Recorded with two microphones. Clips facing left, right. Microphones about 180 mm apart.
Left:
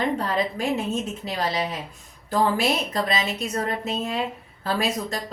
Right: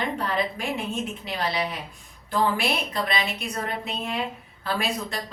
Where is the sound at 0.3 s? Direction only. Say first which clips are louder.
Left 3 dB; 40° left (ahead or behind).